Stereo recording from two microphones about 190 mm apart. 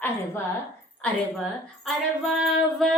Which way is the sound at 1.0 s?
Centre (ahead or behind).